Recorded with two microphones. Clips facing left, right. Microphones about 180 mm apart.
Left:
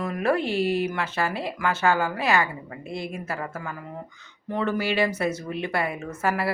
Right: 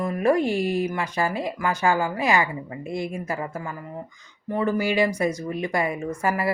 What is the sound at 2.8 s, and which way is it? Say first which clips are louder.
Speech: right 4 dB; 50° right (ahead or behind).